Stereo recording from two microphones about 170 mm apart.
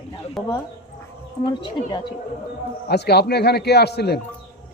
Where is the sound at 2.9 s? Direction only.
70° left (ahead or behind).